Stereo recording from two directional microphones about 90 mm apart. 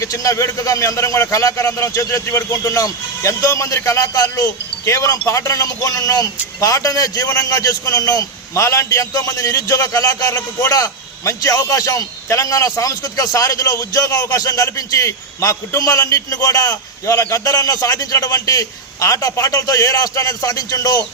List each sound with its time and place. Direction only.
0.0 s speech: 35° left (ahead or behind)